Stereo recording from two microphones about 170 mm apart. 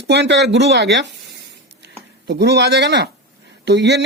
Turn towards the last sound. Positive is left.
turn(degrees=-85)